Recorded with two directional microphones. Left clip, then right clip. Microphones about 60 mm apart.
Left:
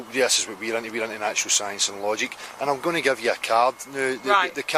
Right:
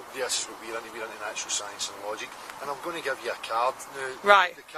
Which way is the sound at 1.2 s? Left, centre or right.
Left.